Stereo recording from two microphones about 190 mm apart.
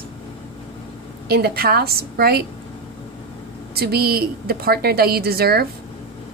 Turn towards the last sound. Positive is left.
turn(degrees=-55)  # may be behind; listen again after turning